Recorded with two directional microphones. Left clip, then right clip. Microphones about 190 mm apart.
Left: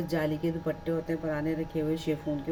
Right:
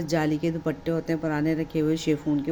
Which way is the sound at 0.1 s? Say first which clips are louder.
Right 6 dB; 55° right (ahead or behind).